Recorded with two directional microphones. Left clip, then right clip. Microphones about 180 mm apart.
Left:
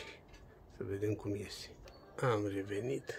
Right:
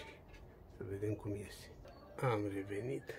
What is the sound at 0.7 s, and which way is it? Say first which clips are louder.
Speech: left 4 dB; 35° left (ahead or behind).